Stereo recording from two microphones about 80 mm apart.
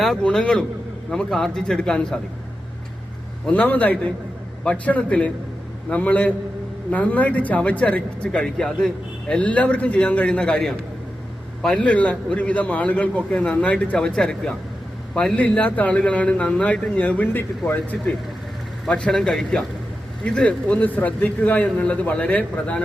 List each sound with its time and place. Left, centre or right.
0.2 s a man's voice: centre
3.5 s a man's voice: centre
11.8 s a man's voice: centre
18.9 s a man's voice: centre